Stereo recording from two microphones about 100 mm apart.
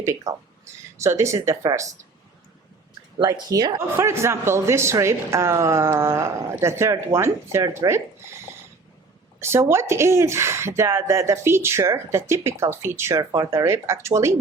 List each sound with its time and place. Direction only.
0.0 s speech: 30° right (ahead or behind)
3.5 s speech: 40° right (ahead or behind)
3.8 s speech: 25° right (ahead or behind)
9.4 s speech: 25° right (ahead or behind)